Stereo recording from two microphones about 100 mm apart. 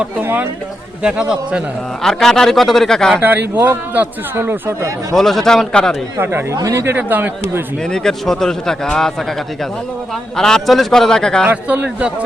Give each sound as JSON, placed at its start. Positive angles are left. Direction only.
{"t": 0.0, "sound": "speech", "side_deg": -20}
{"t": 2.0, "sound": "a man's voice", "side_deg": 5}
{"t": 3.2, "sound": "a man's voice", "side_deg": -20}
{"t": 5.1, "sound": "a man's voice", "side_deg": 5}
{"t": 6.1, "sound": "a man's voice", "side_deg": -25}
{"t": 6.9, "sound": "a man's voice", "side_deg": -20}
{"t": 7.9, "sound": "a man's voice", "side_deg": 5}
{"t": 10.3, "sound": "a man's voice", "side_deg": 5}
{"t": 11.4, "sound": "speech", "side_deg": -15}